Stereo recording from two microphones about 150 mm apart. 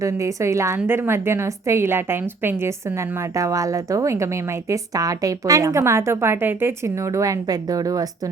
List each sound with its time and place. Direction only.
0.0 s a woman's voice: 20° right (ahead or behind)